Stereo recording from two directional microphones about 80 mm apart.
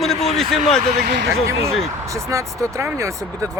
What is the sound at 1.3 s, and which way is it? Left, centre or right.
Speech, right.